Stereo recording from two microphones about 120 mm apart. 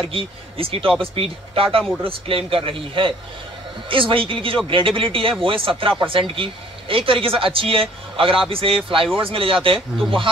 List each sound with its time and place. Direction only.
0.1 s speech: 50° right (ahead or behind)